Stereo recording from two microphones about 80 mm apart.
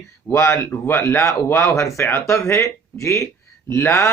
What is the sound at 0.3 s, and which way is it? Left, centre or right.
Speech, left.